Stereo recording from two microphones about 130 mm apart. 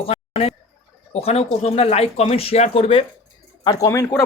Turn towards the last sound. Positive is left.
turn(degrees=25)  # may be behind; listen again after turning